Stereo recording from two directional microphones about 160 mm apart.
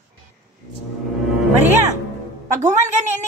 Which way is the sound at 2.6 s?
50° right (ahead or behind).